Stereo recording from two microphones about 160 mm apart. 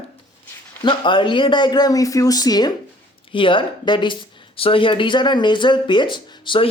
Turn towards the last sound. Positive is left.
turn(degrees=30)  # may be behind; listen again after turning